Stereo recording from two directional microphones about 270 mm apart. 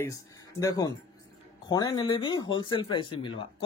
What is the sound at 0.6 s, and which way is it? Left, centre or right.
Speech, centre.